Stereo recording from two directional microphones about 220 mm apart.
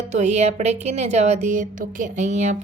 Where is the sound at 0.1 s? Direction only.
30° right (ahead or behind).